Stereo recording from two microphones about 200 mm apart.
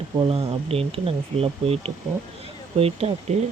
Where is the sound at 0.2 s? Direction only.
25° right (ahead or behind).